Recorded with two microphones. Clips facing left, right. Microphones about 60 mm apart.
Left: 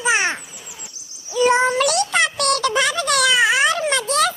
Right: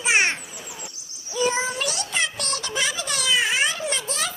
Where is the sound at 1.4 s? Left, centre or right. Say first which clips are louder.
Left 8 dB; left.